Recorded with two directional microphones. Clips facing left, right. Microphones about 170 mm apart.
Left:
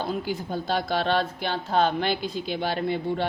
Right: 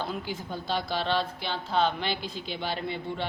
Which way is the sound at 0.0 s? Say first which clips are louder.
Left 5 dB; 40° left (ahead or behind).